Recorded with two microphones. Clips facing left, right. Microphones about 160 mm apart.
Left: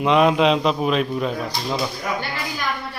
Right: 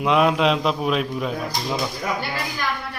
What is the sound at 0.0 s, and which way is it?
A man's voice, centre (ahead or behind).